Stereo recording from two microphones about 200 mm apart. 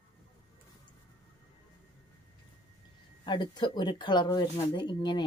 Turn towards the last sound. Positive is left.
turn(degrees=20)  # may be behind; listen again after turning